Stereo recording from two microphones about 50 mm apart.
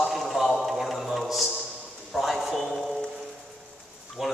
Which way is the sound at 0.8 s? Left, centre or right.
Centre.